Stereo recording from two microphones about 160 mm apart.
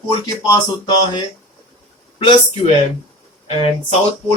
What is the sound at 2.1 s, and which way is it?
Speech, 35° left (ahead or behind).